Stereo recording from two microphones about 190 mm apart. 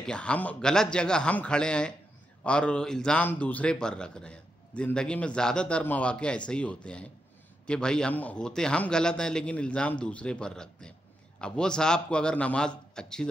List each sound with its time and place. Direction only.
0.0 s speech: 5° left (ahead or behind)